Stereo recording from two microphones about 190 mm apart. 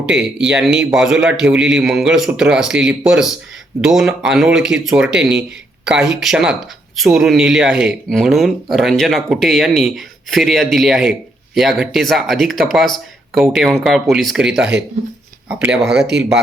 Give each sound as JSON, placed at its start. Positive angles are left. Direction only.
{"t": 0.0, "sound": "speech", "side_deg": -5}